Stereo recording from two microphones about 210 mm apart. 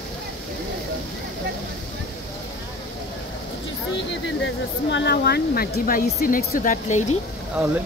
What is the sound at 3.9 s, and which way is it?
Speech, 60° left (ahead or behind).